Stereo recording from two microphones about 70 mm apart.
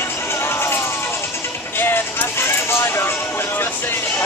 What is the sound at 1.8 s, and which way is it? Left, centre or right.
Speech, left.